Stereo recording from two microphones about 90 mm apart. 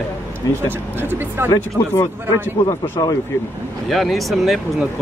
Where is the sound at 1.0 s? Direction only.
25° right (ahead or behind).